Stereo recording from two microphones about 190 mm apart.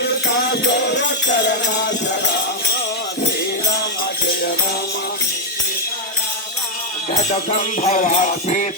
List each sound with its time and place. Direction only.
1.5 s music: 65° left (ahead or behind)
7.1 s jingle bell: 35° left (ahead or behind)